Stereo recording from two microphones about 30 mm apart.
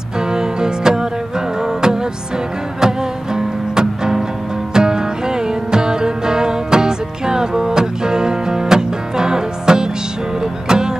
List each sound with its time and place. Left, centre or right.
0.2 s music: right